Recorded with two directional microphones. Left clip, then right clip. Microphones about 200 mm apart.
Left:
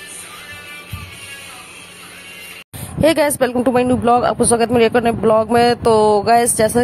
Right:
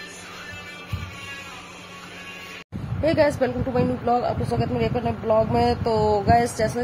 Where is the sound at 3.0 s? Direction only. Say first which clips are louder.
Left 6 dB; 55° left (ahead or behind).